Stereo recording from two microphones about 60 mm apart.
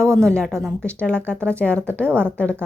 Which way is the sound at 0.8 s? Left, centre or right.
Centre.